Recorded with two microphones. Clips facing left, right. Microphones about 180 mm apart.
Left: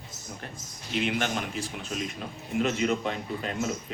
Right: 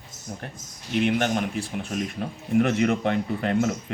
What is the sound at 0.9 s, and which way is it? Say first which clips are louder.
Speech: right 6 dB; 55° right (ahead or behind).